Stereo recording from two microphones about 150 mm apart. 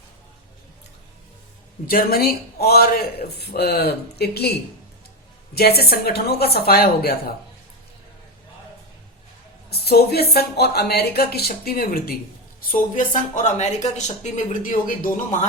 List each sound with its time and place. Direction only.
1.9 s speech: 80° left
5.5 s speech: 90° left
9.6 s speech: 90° left
12.7 s speech: 60° left (ahead or behind)